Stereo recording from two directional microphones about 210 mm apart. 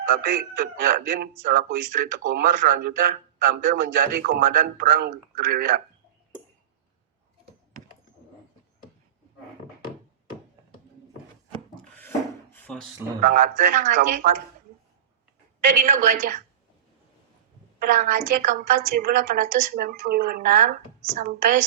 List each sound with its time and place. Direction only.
0.1 s a man's voice: 40° right (ahead or behind)
11.8 s wood: 10° left (ahead or behind)
13.1 s a man's voice: 40° right (ahead or behind)
15.6 s a woman's voice: 40° right (ahead or behind)
17.7 s a man's voice: 40° right (ahead or behind)